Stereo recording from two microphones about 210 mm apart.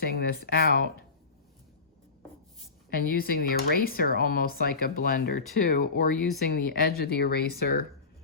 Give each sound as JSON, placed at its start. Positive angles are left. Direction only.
{"t": 0.0, "sound": "speech", "side_deg": 45}
{"t": 2.9, "sound": "speech", "side_deg": 45}
{"t": 6.1, "sound": "speech", "side_deg": 0}
{"t": 6.5, "sound": "speech", "side_deg": 45}